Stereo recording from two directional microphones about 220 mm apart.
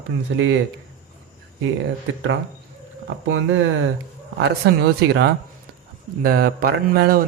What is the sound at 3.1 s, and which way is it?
Speech, 55° right (ahead or behind).